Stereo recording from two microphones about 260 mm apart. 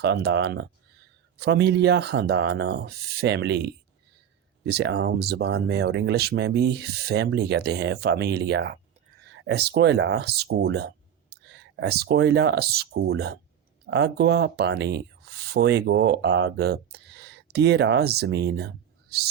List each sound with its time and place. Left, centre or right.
0.0 s speech: right